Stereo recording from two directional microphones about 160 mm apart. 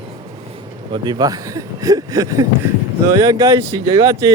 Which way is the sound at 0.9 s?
25° right (ahead or behind).